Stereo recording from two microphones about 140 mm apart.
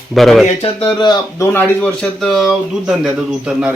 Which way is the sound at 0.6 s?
35° left (ahead or behind).